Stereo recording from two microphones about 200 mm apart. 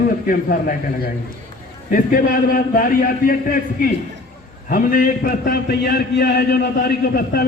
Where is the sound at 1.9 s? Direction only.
45° left (ahead or behind).